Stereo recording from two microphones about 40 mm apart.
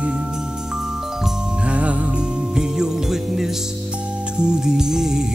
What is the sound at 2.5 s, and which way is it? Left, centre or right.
Music, centre.